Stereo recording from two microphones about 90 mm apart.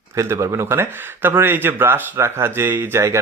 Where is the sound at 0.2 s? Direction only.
35° right (ahead or behind).